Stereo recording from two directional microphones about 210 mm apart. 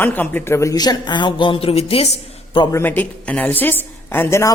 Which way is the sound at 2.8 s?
10° left (ahead or behind).